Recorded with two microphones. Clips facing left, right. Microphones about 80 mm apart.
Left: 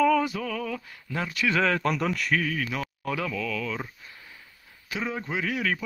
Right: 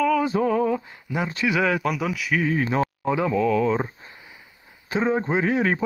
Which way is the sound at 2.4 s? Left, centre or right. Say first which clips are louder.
Right 8 dB; right.